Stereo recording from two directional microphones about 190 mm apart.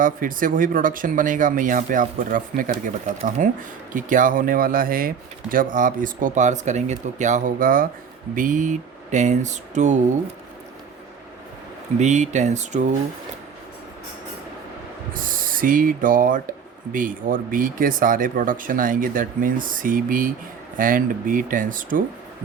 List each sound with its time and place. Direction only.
0.0 s speech: 45° right (ahead or behind)
11.9 s speech: 40° right (ahead or behind)
15.1 s speech: 45° right (ahead or behind)